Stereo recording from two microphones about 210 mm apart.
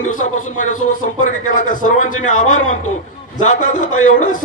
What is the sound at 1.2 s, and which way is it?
Speech, 40° left (ahead or behind).